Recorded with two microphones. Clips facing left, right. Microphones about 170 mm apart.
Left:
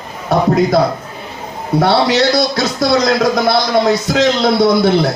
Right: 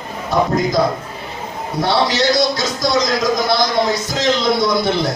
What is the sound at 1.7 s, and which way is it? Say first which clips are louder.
A man's voice: left 5 dB; 65° left (ahead or behind).